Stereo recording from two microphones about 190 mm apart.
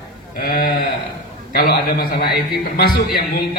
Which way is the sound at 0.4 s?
50° left (ahead or behind).